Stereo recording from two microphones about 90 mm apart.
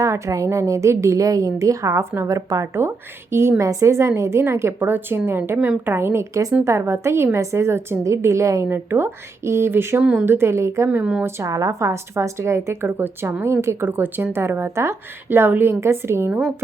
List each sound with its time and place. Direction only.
0.0 s a woman's voice: 35° right (ahead or behind)
10.0 s speech: 10° right (ahead or behind)
10.2 s a woman's voice: 25° right (ahead or behind)